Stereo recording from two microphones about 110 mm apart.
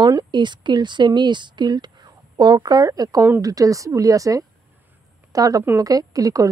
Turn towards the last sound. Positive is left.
turn(degrees=-30)  # may be behind; listen again after turning